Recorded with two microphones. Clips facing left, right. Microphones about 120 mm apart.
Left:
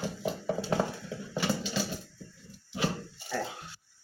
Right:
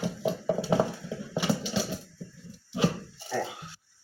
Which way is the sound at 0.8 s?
20° right (ahead or behind).